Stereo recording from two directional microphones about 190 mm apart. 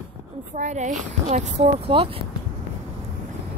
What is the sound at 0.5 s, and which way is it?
A woman's voice, 40° right (ahead or behind).